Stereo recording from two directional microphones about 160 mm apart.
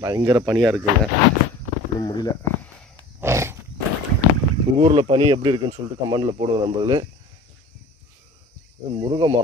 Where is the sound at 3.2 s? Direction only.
15° right (ahead or behind).